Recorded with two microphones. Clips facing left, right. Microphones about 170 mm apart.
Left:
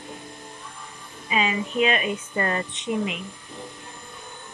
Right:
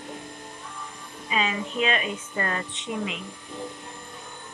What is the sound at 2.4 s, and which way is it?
Speech, 25° left (ahead or behind).